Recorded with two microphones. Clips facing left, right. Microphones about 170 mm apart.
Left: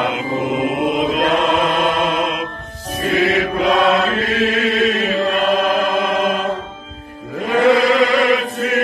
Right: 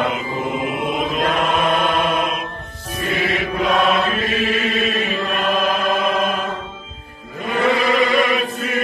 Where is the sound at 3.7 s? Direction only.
90° left.